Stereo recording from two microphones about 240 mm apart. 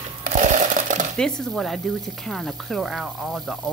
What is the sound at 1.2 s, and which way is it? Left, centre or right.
Speech, centre.